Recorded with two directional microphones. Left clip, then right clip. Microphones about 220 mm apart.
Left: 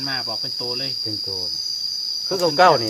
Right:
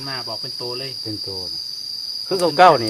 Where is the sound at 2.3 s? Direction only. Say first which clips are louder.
Right 3 dB; 35° right (ahead or behind).